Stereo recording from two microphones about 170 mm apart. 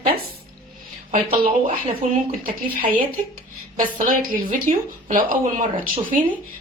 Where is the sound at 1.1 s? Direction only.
35° right (ahead or behind).